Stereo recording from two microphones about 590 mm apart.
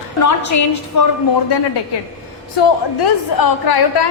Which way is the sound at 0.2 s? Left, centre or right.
Left.